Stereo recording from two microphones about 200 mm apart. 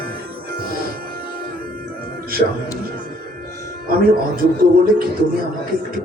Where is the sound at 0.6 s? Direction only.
50° right (ahead or behind).